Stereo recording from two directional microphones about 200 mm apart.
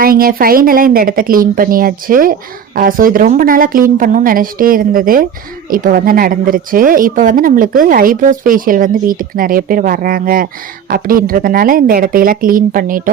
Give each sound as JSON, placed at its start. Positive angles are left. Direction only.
{"t": 0.0, "sound": "speech", "side_deg": -45}